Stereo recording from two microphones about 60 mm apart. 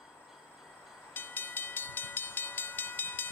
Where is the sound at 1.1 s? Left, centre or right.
Left.